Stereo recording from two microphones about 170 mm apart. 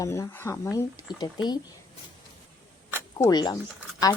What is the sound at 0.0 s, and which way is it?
Speech, 15° left (ahead or behind).